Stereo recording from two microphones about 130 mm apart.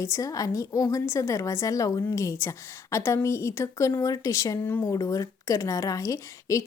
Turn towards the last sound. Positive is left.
turn(degrees=25)  # may be behind; listen again after turning